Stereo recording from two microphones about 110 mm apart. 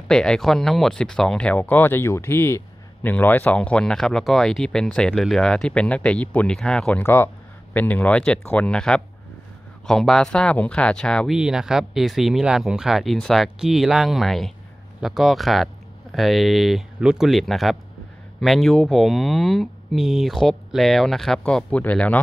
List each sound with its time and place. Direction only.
0.1 s speech: 5° left (ahead or behind)
7.0 s speech: 25° left (ahead or behind); by 11.3 s 5° left (ahead or behind)
11.3 s speech: 5° right (ahead or behind); by 22.2 s 10° left (ahead or behind)